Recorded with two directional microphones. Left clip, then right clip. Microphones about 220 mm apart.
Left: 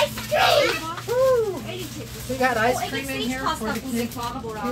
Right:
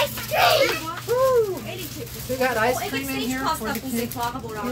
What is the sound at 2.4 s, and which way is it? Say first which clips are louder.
Speech: left 1 dB; centre (ahead or behind).